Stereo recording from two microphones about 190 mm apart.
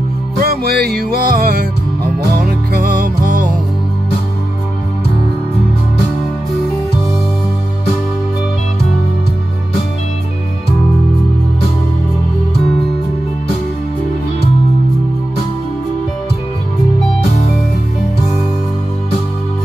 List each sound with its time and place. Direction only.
0.4 s music: 55° right (ahead or behind)